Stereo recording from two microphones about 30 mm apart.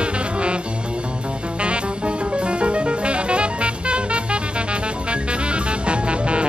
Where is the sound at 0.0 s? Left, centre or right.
Right.